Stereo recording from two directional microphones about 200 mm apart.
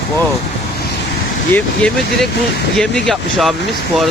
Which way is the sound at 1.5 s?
5° left (ahead or behind).